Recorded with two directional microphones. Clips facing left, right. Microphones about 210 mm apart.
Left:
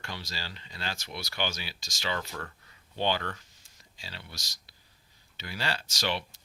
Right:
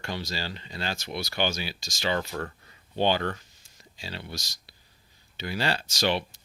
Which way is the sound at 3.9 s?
20° right (ahead or behind).